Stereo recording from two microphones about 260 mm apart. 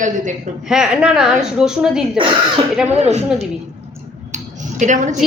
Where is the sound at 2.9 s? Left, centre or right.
Right.